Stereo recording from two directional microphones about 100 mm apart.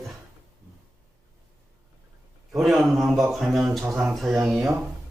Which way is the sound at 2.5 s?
Centre (ahead or behind).